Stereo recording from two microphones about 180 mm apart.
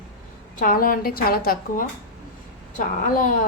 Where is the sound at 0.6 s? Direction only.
50° left (ahead or behind).